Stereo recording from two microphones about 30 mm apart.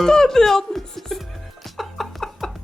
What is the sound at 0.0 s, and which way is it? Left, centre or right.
Speech, centre.